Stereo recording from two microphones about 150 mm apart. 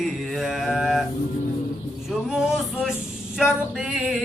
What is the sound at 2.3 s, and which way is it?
Male singing, 5° right (ahead or behind).